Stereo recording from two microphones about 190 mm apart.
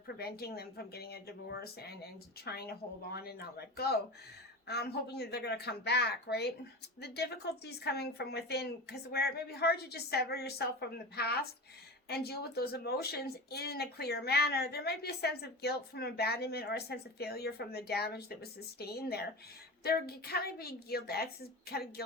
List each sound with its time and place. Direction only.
0.1 s speech: 55° left (ahead or behind)